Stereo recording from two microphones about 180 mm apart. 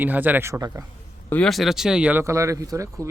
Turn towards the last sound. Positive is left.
turn(degrees=-15)  # may be behind; listen again after turning